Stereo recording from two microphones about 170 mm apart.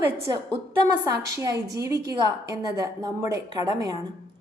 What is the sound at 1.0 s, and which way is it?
A woman's voice, 20° right (ahead or behind).